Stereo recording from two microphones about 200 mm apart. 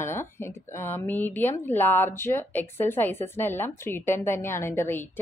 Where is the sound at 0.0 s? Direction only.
10° left (ahead or behind).